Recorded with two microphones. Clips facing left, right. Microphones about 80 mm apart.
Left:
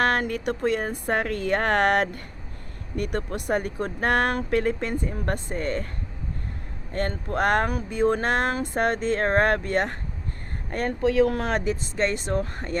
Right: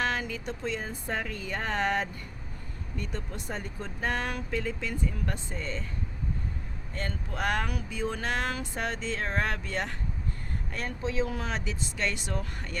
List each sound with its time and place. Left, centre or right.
0.0 s speech: left
6.9 s speech: left
11.0 s speech: left